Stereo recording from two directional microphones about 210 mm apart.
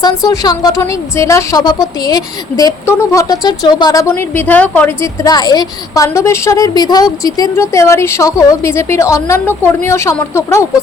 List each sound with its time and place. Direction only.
0.0 s a woman's voice: 20° left (ahead or behind)
5.3 s a woman's voice: 20° left (ahead or behind)